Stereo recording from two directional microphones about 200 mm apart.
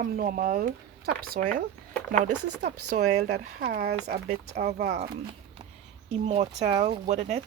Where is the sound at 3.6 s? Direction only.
50° right (ahead or behind).